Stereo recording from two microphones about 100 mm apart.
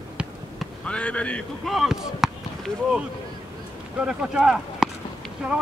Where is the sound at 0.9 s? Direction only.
10° left (ahead or behind).